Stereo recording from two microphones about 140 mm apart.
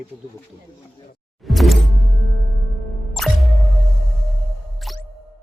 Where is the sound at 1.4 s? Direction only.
Centre (ahead or behind).